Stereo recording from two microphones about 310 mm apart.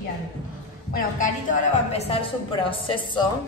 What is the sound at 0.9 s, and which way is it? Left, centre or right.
Music, left.